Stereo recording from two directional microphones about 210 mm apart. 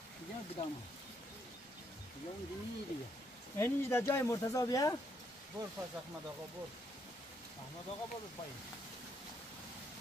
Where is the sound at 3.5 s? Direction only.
10° left (ahead or behind).